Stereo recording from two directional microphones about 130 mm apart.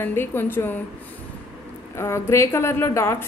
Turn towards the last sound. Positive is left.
turn(degrees=20)  # may be behind; listen again after turning